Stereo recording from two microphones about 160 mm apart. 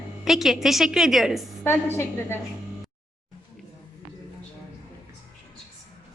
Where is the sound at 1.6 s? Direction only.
15° left (ahead or behind).